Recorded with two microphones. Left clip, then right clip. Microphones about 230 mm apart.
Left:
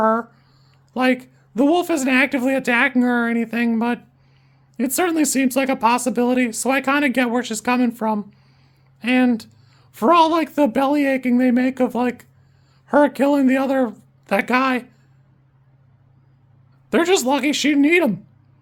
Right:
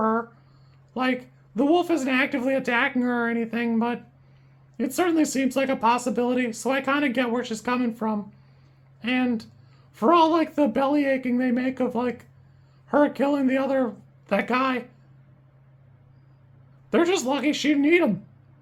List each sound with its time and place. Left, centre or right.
0.0 s a sound: left
0.9 s speech: left
16.9 s speech: left